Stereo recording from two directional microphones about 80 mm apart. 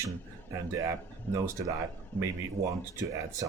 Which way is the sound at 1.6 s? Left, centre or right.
Right.